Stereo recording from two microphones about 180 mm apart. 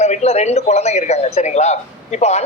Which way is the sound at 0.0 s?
35° left (ahead or behind).